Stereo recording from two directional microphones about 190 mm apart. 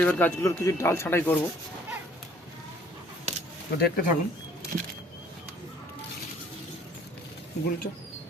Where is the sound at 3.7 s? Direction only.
55° left (ahead or behind).